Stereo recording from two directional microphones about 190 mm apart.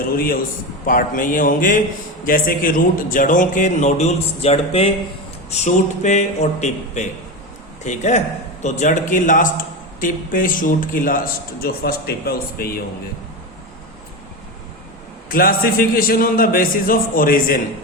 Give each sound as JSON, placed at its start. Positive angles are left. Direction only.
{"t": 0.9, "sound": "a man's voice", "side_deg": 45}
{"t": 15.3, "sound": "a man's voice", "side_deg": 50}